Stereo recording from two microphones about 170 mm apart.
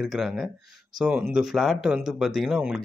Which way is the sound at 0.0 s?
Centre (ahead or behind).